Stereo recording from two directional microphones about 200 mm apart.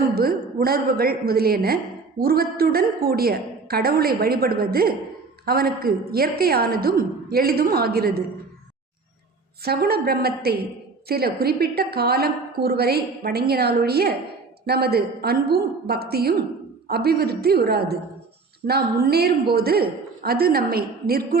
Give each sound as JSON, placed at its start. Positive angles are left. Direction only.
{"t": 0.1, "sound": "a woman's voice", "side_deg": -50}
{"t": 9.6, "sound": "a woman's voice", "side_deg": -50}